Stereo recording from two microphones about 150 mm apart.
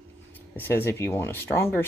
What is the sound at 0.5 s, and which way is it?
Speech, 15° left (ahead or behind).